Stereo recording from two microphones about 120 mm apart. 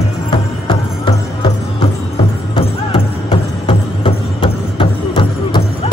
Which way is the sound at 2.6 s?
50° left (ahead or behind).